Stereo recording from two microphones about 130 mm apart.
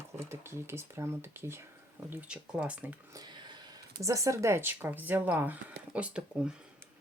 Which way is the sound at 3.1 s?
35° right (ahead or behind).